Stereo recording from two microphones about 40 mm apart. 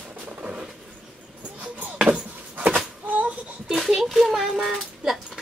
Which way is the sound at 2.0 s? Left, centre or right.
Right.